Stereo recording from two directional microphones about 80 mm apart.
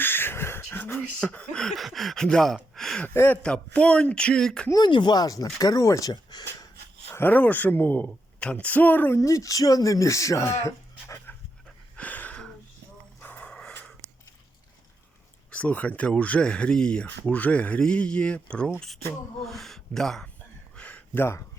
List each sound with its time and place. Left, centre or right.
0.0 s beatboxing: left
0.7 s a sound: left
1.2 s speech: centre
3.1 s speech: left
3.4 s speech: centre
4.9 s speech: left
7.1 s a woman's voice: left
9.1 s speech: left
11.9 s a sound: centre
15.5 s speech: centre
19.4 s speech: centre
20.7 s a sound: centre